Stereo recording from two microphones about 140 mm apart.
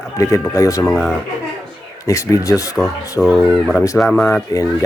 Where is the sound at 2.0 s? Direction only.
20° left (ahead or behind).